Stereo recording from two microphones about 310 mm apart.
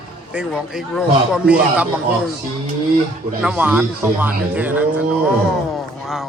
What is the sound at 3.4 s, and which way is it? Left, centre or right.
A man's voice, centre.